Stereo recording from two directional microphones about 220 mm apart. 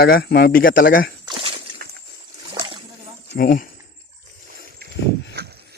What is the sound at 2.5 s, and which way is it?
Boat, 25° right (ahead or behind).